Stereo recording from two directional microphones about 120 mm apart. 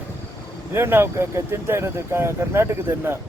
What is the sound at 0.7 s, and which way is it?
Speech, 20° right (ahead or behind).